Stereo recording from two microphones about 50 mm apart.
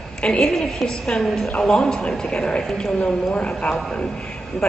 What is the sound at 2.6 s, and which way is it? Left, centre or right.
Speech, centre.